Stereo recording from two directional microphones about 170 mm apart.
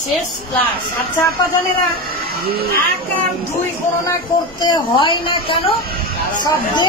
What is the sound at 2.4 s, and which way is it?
Speech, 65° right (ahead or behind).